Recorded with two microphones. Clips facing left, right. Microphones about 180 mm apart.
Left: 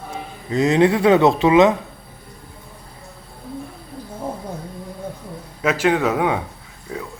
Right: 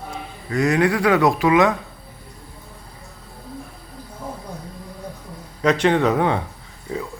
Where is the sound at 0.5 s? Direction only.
20° left (ahead or behind).